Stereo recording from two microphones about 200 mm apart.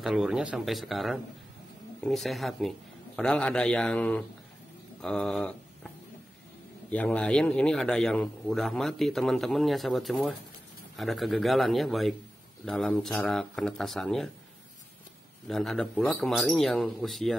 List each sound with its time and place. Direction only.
0.0 s a man's voice: centre (ahead or behind)
6.9 s a man's voice: 5° left (ahead or behind)
15.4 s a man's voice: centre (ahead or behind)